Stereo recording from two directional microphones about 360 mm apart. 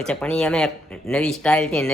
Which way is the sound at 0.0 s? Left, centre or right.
Centre.